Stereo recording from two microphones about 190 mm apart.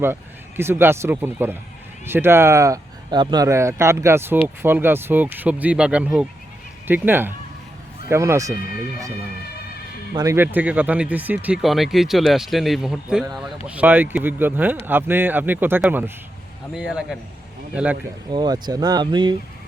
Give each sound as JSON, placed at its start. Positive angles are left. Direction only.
{"t": 0.0, "sound": "speech", "side_deg": -10}
{"t": 10.2, "sound": "speech", "side_deg": -15}
{"t": 18.3, "sound": "speech", "side_deg": -20}